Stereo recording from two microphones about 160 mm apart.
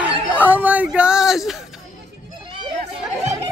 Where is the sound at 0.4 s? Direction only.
10° right (ahead or behind).